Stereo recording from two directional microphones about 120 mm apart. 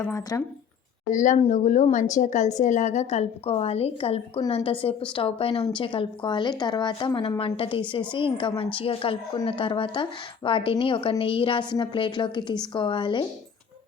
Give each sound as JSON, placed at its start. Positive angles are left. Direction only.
{"t": 0.1, "sound": "speech", "side_deg": 30}
{"t": 1.1, "sound": "a woman's voice", "side_deg": 90}
{"t": 7.2, "sound": "speech", "side_deg": 55}